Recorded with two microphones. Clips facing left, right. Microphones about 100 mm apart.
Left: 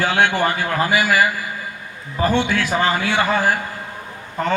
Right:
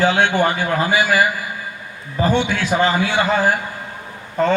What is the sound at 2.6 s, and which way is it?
Speech, 20° right (ahead or behind).